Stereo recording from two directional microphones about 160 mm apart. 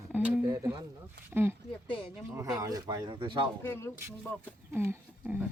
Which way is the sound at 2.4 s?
20° right (ahead or behind).